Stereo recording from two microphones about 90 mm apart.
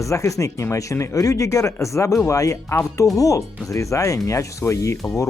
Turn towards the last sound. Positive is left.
turn(degrees=35)  # may be behind; listen again after turning